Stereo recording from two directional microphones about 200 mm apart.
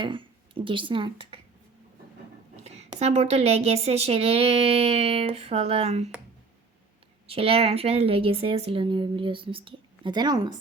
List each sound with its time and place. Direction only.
0.0 s speech: 25° right (ahead or behind)
3.0 s speech: 30° right (ahead or behind)
7.3 s a woman's voice: 30° right (ahead or behind)